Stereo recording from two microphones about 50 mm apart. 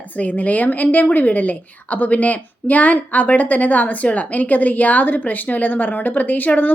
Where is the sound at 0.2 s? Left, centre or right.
Left.